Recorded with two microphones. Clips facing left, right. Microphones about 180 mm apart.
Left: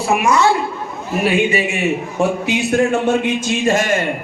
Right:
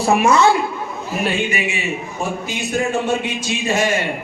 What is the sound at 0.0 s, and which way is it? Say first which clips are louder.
Speech: right 1 dB; 30° right (ahead or behind).